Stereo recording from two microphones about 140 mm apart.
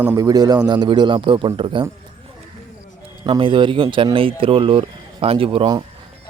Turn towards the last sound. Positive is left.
turn(degrees=-35)  # may be behind; listen again after turning